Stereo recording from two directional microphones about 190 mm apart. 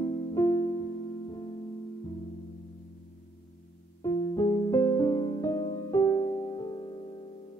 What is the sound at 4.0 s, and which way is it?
Music, 15° left (ahead or behind).